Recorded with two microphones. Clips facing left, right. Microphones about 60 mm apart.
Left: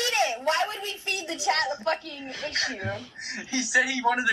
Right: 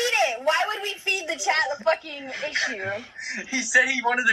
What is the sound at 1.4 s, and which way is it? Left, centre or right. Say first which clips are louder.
Speech: right 2 dB; centre.